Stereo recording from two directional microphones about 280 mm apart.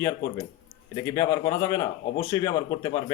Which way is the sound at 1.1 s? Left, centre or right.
Centre.